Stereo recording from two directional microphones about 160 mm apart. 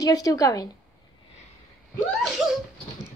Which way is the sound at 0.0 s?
25° left (ahead or behind).